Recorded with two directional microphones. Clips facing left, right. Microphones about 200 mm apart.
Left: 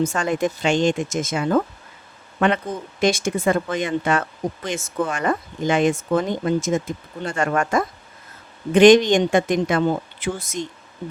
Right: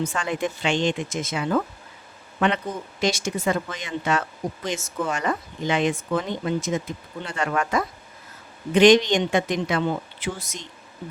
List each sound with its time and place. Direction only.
0.0 s speech: 45° left (ahead or behind)
3.0 s speech: 50° left (ahead or behind)